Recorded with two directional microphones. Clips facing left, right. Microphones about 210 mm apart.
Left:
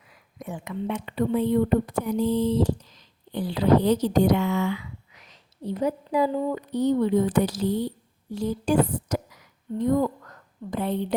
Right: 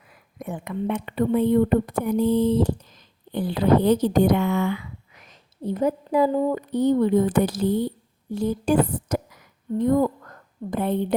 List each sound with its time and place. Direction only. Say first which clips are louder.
0.1 s a woman's voice: right 3 dB; 55° right (ahead or behind)